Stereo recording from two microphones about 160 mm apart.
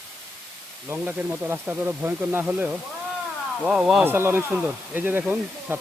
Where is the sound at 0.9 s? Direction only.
10° right (ahead or behind).